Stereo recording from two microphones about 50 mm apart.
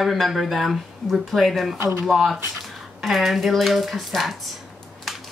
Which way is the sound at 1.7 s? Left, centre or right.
Right.